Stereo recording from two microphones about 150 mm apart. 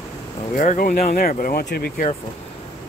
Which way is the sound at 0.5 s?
60° left (ahead or behind).